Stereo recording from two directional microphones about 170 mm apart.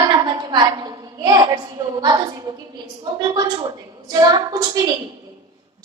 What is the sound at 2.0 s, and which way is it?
A woman's voice, 25° right (ahead or behind).